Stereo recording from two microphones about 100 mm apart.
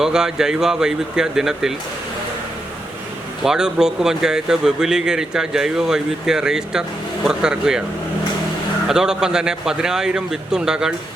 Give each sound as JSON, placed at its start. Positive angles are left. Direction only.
{"t": 0.0, "sound": "speech", "side_deg": -5}
{"t": 3.4, "sound": "a man's voice", "side_deg": -5}
{"t": 8.9, "sound": "a man's voice", "side_deg": -5}